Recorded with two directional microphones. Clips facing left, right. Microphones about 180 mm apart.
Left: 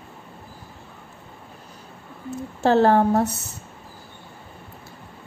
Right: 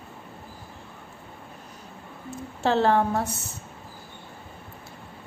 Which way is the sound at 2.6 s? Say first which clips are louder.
Left 5 dB; 45° left (ahead or behind).